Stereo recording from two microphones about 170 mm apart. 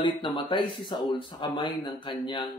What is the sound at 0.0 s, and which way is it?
Speech, 25° left (ahead or behind).